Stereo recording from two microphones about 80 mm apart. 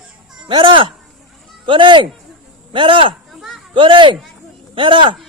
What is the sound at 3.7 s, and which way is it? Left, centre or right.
Speech, right.